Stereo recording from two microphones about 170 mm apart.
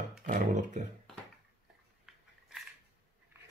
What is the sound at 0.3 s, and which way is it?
Roar, 45° right (ahead or behind).